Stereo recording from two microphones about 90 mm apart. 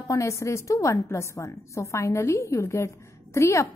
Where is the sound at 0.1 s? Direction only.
35° left (ahead or behind).